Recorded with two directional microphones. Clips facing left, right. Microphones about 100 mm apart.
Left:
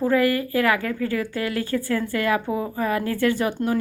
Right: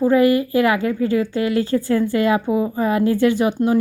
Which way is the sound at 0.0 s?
20° right (ahead or behind).